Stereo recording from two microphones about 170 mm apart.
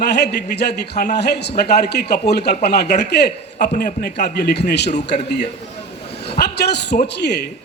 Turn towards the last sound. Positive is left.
turn(degrees=80)